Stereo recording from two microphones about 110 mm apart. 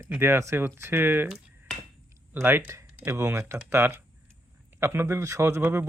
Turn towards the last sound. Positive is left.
turn(degrees=-25)  # may be behind; listen again after turning